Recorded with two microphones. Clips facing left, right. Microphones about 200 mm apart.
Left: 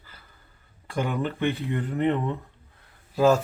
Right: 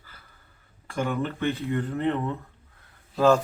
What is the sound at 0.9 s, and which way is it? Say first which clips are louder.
Speech: even; 15° left (ahead or behind).